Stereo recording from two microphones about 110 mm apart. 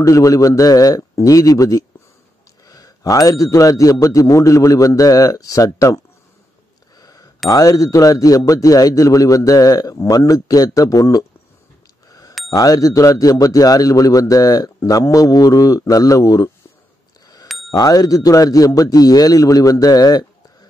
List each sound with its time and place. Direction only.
0.0 s speech: 30° left (ahead or behind)
7.0 s a sound: 35° left (ahead or behind)
7.4 s speech: 35° left (ahead or behind)
12.1 s bicycle bell: 35° left (ahead or behind)
12.4 s speech: 35° left (ahead or behind)
17.6 s speech: 35° left (ahead or behind)